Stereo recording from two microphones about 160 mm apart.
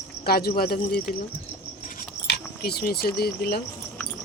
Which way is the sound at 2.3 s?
80° left.